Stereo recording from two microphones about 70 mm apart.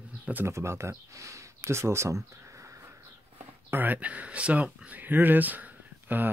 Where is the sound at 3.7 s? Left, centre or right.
Right.